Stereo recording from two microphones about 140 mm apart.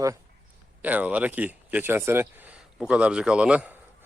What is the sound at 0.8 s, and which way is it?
Speech, 10° right (ahead or behind).